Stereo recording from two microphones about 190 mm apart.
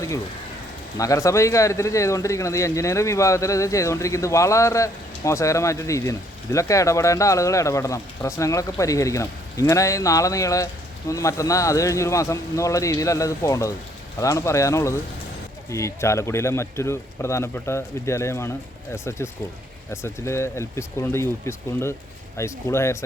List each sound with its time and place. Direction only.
0.9 s speech: 15° left (ahead or behind)
19.9 s speech: 15° left (ahead or behind)